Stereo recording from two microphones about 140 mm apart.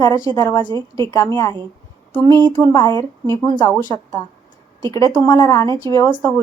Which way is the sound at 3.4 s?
20° left (ahead or behind).